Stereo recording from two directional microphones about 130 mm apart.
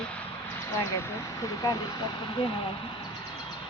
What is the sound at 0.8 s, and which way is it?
Speech, 20° left (ahead or behind).